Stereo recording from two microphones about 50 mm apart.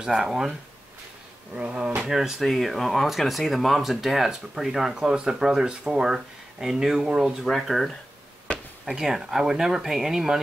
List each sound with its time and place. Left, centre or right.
0.0 s speech: centre
1.5 s speech: right
2.0 s speech: centre
2.4 s speech: centre
8.5 s a sound: left
8.8 s speech: centre